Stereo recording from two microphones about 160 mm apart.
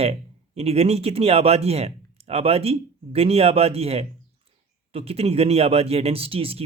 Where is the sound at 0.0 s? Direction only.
40° right (ahead or behind).